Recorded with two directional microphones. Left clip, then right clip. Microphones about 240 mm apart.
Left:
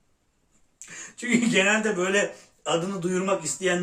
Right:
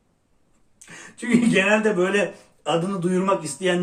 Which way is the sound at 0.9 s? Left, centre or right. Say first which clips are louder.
Right 2 dB; centre.